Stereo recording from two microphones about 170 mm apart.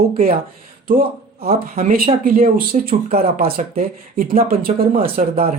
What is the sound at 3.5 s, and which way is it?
Speech, 55° right (ahead or behind).